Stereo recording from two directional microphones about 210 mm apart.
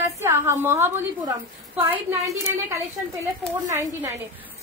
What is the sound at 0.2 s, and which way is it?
A woman's voice, 10° right (ahead or behind).